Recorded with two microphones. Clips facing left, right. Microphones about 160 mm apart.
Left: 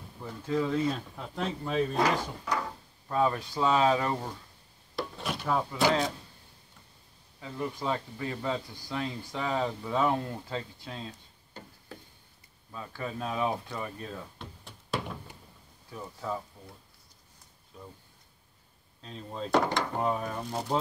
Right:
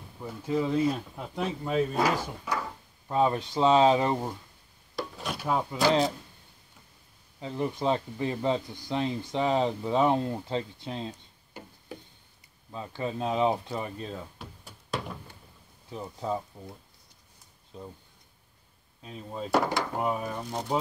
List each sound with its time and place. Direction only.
0.2 s speech: 15° right (ahead or behind)
3.1 s speech: 20° right (ahead or behind)
4.9 s wood: centre (ahead or behind)
5.5 s speech: 15° right (ahead or behind)
7.3 s speech: 25° right (ahead or behind)
11.6 s a sound: 10° right (ahead or behind)
12.7 s speech: 25° right (ahead or behind)
14.4 s knock: centre (ahead or behind)
15.9 s speech: 25° right (ahead or behind)
17.7 s speech: 30° right (ahead or behind)
18.9 s speech: 10° right (ahead or behind)